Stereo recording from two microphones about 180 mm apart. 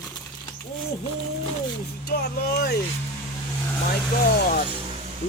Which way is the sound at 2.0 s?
65° left (ahead or behind).